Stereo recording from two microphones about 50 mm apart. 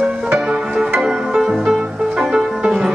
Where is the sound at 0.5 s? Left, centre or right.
Centre.